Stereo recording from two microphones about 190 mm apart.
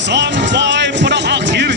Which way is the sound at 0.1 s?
70° right (ahead or behind).